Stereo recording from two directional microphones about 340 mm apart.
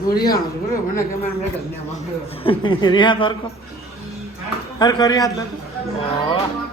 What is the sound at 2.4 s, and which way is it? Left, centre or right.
Speech, centre.